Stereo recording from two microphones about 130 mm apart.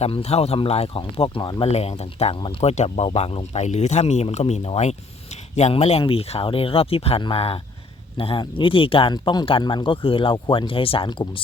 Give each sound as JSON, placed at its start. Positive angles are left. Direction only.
{"t": 0.0, "sound": "speech", "side_deg": 55}
{"t": 1.6, "sound": "speech", "side_deg": 50}